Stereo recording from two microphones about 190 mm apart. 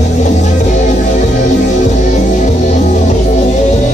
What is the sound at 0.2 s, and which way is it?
Music, 40° left (ahead or behind).